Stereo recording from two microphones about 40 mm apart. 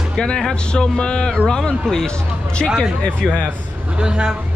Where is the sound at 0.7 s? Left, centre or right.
Centre.